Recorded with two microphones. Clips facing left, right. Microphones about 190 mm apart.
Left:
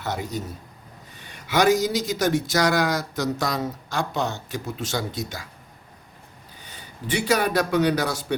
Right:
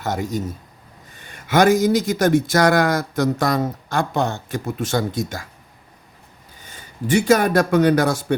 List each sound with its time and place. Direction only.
0.0 s speech: 45° right (ahead or behind)
6.7 s speech: 45° right (ahead or behind)